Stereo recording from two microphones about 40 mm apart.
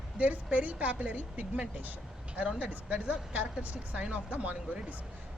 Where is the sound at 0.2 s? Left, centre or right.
Right.